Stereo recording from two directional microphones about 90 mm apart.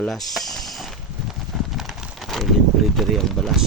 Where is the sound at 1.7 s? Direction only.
Centre (ahead or behind).